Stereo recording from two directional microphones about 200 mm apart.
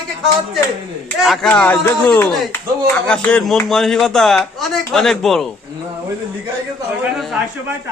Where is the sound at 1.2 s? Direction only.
Centre (ahead or behind).